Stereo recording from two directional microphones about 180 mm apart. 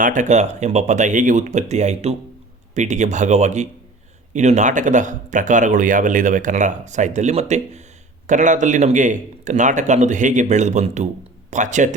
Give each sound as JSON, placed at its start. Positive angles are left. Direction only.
{"t": 0.0, "sound": "speech", "side_deg": -45}